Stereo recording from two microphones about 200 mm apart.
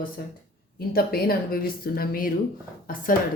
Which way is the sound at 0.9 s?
50° left (ahead or behind).